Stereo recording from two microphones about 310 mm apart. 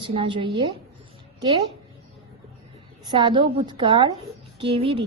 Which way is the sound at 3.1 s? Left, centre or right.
Centre.